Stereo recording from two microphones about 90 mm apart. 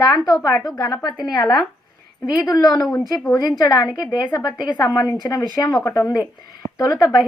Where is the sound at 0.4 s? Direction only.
40° left (ahead or behind).